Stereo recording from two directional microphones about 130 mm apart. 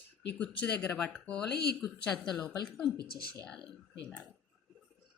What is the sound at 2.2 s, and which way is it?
Speech, 35° left (ahead or behind).